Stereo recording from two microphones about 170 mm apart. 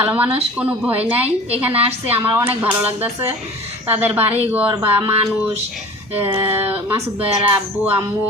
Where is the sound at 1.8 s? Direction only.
35° right (ahead or behind).